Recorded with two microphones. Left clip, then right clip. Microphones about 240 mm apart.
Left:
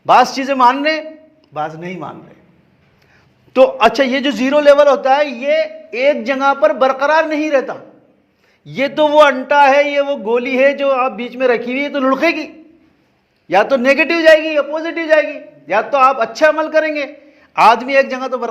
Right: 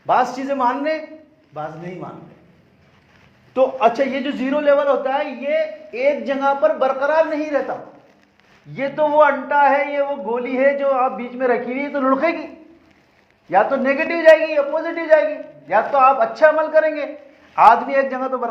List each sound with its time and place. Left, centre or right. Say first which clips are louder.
0.0 s a man's voice: left 7 dB; left
3.5 s a man's voice: left 6 dB; left
8.7 s a man's voice: left 5 dB; left
13.5 s a man's voice: left 5 dB; left